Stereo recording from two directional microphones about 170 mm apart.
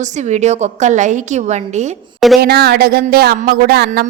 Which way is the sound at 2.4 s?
70° right (ahead or behind).